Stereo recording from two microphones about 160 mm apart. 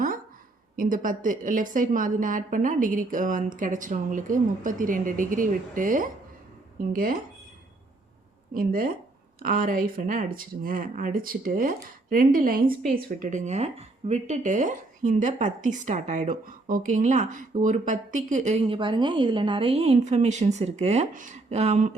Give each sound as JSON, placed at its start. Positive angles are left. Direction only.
{"t": 0.8, "sound": "a woman's voice", "side_deg": -60}
{"t": 8.5, "sound": "a woman's voice", "side_deg": -60}
{"t": 18.6, "sound": "a woman's voice", "side_deg": -30}